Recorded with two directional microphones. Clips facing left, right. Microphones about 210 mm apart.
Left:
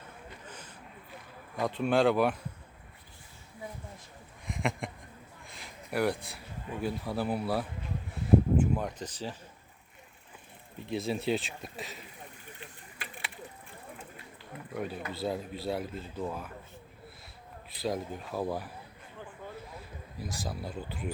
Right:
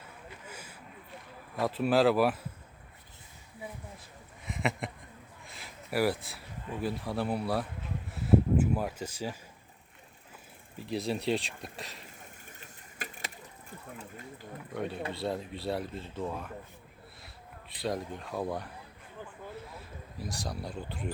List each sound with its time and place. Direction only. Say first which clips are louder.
0.4 s a sound: right 1 dB; 10° right (ahead or behind)
1.5 s speech: right 1 dB; 5° right (ahead or behind)
4.4 s a sound: even; centre (ahead or behind)
6.8 s speech: even; centre (ahead or behind)
8.1 s a sound: left 1 dB; 5° right (ahead or behind)
10.8 s speech: even; centre (ahead or behind)
12.5 s pigeon: right 1 dB; 40° right (ahead or behind)
14.7 s speech: right 1 dB; centre (ahead or behind)
17.7 s speech: left 1 dB; centre (ahead or behind)
20.1 s speech: even; centre (ahead or behind)